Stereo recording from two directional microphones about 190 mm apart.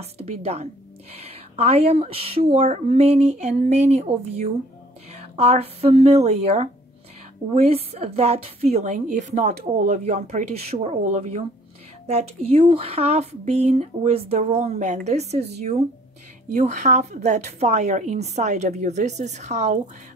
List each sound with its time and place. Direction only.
0.0 s a woman's voice: 35° right (ahead or behind)
12.4 s a woman's voice: 30° right (ahead or behind)